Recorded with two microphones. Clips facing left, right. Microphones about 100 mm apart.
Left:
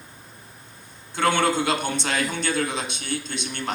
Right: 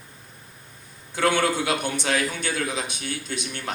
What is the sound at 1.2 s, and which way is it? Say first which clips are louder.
A man's voice: left 1 dB; 25° left (ahead or behind).